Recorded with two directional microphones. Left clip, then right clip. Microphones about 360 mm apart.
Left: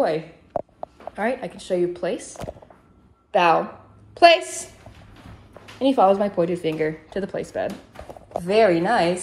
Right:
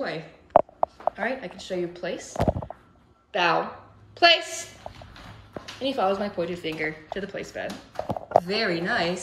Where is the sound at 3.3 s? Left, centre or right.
Centre.